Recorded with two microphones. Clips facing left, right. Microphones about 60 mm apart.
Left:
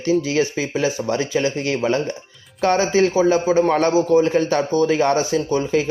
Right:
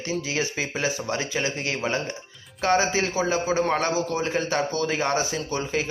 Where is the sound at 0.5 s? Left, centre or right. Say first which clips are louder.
Left 6 dB; right.